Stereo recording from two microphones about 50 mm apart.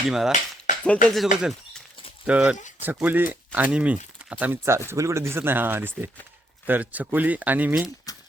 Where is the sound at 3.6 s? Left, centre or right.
Right.